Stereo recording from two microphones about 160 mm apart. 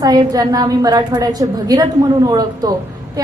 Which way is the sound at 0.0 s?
25° right (ahead or behind).